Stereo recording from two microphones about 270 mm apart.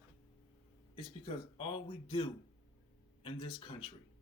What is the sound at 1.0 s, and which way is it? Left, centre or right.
Speech, centre.